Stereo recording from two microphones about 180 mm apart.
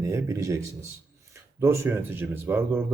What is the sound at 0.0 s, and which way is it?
Speech, 15° right (ahead or behind).